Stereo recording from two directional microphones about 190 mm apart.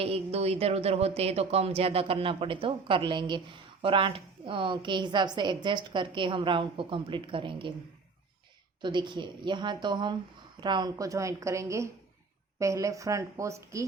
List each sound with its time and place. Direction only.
0.0 s speech: 30° right (ahead or behind)
8.8 s a woman's voice: 25° right (ahead or behind)